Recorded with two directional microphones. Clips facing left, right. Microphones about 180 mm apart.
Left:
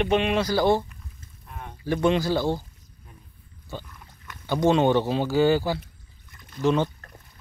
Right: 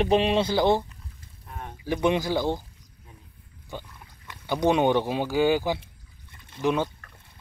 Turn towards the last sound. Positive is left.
turn(degrees=-10)  # may be behind; listen again after turning